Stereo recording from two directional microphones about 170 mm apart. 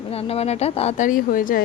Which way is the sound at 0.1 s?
35° left (ahead or behind).